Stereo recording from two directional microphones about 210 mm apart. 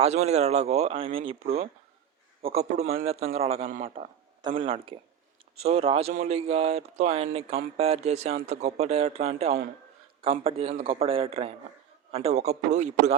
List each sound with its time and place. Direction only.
0.0 s a man's voice: 30° right (ahead or behind)